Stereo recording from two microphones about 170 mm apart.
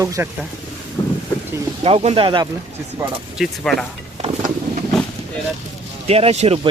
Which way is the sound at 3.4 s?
Centre (ahead or behind).